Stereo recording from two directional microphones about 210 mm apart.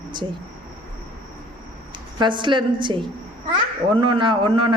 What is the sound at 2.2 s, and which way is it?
Speech, 20° right (ahead or behind).